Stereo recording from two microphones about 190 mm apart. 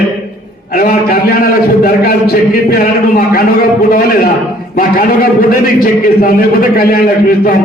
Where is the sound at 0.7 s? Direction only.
50° left (ahead or behind).